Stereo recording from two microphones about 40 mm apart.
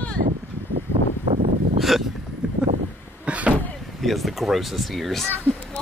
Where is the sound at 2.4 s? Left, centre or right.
Right.